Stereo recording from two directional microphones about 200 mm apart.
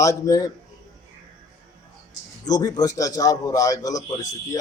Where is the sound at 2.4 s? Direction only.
20° left (ahead or behind).